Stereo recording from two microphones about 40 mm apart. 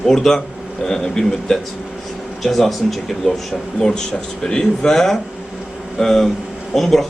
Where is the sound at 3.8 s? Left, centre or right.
Centre.